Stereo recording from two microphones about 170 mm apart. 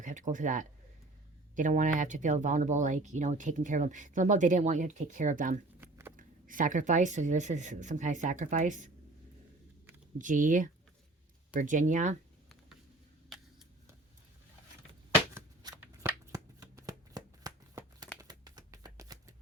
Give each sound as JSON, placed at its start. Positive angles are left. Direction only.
{"t": 0.0, "sound": "speech", "side_deg": -45}
{"t": 5.8, "sound": "a sound", "side_deg": -15}
{"t": 6.1, "sound": "speech", "side_deg": -50}
{"t": 10.2, "sound": "speech", "side_deg": -50}
{"t": 13.3, "sound": "a sound", "side_deg": 0}
{"t": 16.0, "sound": "shuffling cards", "side_deg": -15}